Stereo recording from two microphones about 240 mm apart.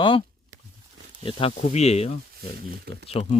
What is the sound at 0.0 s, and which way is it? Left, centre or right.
Speech, left.